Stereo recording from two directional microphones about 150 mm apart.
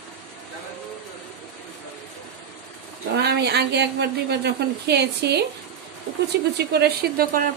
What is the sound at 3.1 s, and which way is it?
Speech, 90° right.